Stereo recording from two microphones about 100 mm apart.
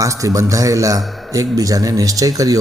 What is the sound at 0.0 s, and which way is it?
A man's voice, 35° right (ahead or behind).